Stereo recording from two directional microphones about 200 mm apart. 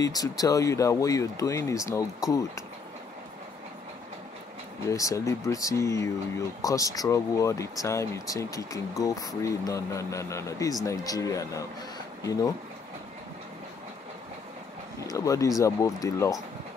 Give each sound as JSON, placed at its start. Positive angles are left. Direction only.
{"t": 0.0, "sound": "speech", "side_deg": 20}
{"t": 4.8, "sound": "speech", "side_deg": 15}
{"t": 15.0, "sound": "speech", "side_deg": 15}